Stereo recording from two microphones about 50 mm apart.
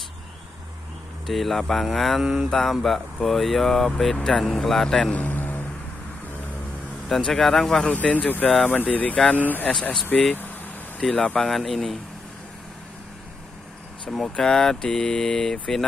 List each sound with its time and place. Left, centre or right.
1.2 s speech: centre
5.1 s vehicle: left
7.1 s speech: centre
7.9 s speech: left
10.1 s speech: centre
14.1 s speech: centre